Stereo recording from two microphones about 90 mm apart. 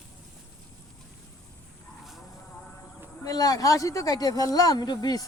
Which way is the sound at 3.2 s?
45° left (ahead or behind).